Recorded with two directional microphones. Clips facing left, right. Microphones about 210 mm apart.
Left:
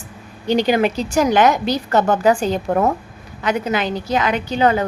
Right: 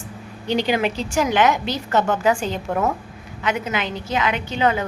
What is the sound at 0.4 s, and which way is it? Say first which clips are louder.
A woman's voice: left 4 dB; 45° left (ahead or behind).